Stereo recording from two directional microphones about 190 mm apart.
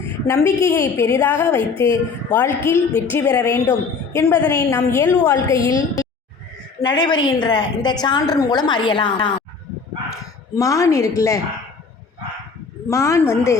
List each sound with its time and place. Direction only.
0.3 s a woman's voice: 15° left (ahead or behind)
10.5 s a woman's voice: 15° left (ahead or behind)
12.9 s a woman's voice: 15° left (ahead or behind)